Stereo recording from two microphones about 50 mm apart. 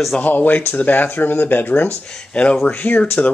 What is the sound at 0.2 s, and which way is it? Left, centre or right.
Speech, left.